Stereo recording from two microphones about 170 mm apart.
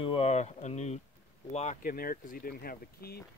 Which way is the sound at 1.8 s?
55° left (ahead or behind).